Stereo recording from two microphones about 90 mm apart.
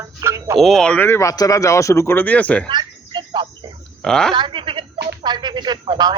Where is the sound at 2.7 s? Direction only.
60° right (ahead or behind).